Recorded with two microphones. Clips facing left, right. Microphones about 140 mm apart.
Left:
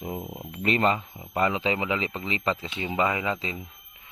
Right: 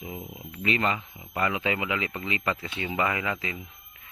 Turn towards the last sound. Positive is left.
turn(degrees=20)  # may be behind; listen again after turning